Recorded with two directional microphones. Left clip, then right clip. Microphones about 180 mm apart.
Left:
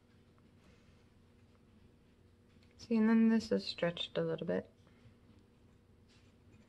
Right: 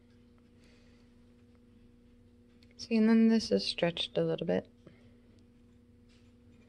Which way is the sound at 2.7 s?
30° right (ahead or behind).